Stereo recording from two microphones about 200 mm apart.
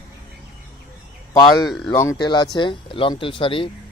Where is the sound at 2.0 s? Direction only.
15° left (ahead or behind).